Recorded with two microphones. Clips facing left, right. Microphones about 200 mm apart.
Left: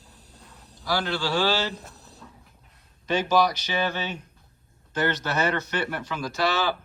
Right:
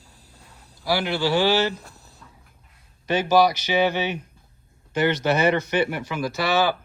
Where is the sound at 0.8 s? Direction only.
10° right (ahead or behind).